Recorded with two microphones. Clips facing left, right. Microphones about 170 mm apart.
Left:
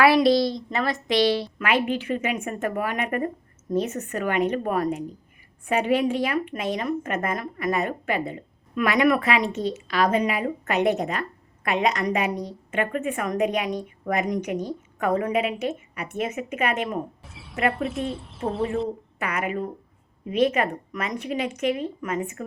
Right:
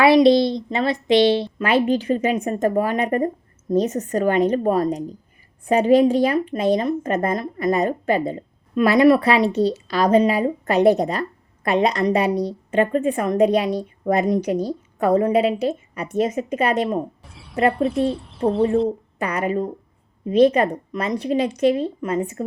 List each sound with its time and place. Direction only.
0.0 s a woman's voice: 25° right (ahead or behind)
17.2 s a sound: centre (ahead or behind)
17.7 s speech: centre (ahead or behind)
19.2 s a woman's voice: 35° right (ahead or behind)